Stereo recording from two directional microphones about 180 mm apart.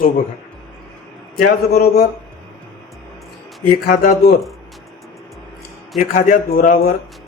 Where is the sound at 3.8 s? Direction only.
50° left (ahead or behind).